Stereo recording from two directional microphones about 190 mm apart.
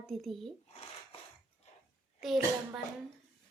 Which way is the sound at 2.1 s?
Centre (ahead or behind).